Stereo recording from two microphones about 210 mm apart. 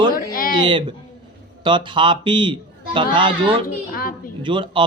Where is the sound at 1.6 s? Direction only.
25° right (ahead or behind).